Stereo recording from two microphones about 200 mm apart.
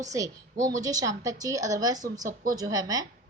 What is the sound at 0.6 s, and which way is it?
Speech, 15° right (ahead or behind).